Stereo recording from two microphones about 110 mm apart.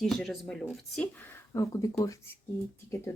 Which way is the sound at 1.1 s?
20° left (ahead or behind).